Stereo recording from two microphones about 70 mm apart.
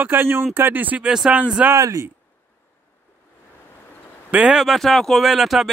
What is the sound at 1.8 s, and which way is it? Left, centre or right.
Speech, right.